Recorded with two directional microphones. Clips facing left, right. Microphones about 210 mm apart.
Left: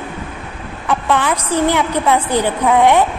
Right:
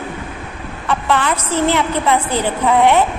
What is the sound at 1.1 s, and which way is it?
A woman's voice, 10° left (ahead or behind).